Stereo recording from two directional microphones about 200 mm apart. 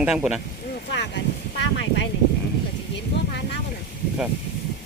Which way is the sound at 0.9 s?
60° left (ahead or behind).